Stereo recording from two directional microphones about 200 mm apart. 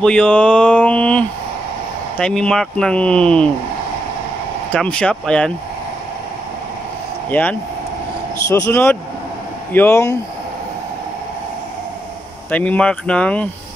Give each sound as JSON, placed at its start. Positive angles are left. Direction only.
{"t": 0.0, "sound": "mantra", "side_deg": 5}
{"t": 2.1, "sound": "speech", "side_deg": 5}
{"t": 4.7, "sound": "speech", "side_deg": 5}
{"t": 7.2, "sound": "speech", "side_deg": 10}
{"t": 12.4, "sound": "speech", "side_deg": 5}